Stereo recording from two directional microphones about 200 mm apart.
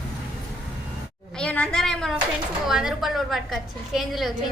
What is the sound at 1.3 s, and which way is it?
A woman's voice, 5° left (ahead or behind).